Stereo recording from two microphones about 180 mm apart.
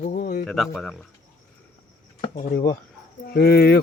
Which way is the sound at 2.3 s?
55° left (ahead or behind).